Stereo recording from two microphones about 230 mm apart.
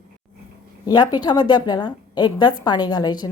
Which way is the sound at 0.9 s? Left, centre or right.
Centre.